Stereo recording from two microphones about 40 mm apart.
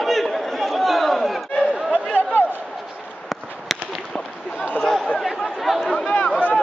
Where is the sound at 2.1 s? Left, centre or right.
Left.